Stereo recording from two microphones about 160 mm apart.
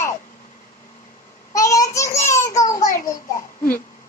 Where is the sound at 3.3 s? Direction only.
60° left (ahead or behind).